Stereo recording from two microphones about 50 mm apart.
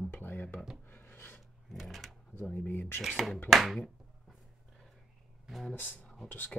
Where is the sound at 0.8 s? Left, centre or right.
Left.